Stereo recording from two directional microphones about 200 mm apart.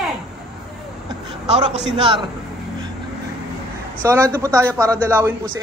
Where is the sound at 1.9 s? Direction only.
25° right (ahead or behind).